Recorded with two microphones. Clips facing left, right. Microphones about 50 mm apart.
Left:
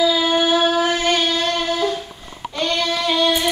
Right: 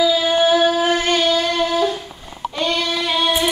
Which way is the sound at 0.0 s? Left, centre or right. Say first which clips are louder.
Right 1 dB; centre.